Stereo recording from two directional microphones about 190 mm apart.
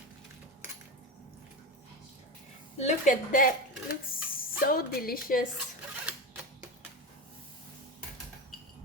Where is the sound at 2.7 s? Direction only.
40° left (ahead or behind).